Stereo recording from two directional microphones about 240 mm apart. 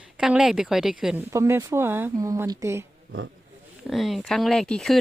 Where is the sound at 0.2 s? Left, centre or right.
Centre.